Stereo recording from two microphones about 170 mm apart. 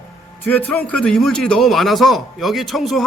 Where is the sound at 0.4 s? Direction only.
10° left (ahead or behind).